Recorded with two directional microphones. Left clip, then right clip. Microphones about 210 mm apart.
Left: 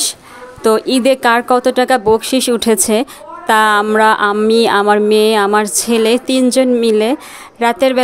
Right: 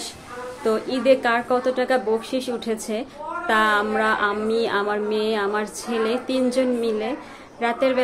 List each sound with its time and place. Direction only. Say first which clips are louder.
0.7 s speech: left 8 dB; 55° left (ahead or behind)